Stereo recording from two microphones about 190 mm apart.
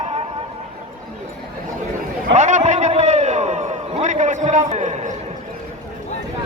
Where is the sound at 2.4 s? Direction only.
40° right (ahead or behind).